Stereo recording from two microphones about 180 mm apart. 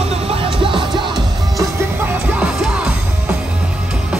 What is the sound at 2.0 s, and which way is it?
Music, 5° right (ahead or behind).